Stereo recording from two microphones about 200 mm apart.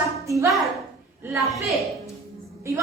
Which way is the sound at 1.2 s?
15° right (ahead or behind).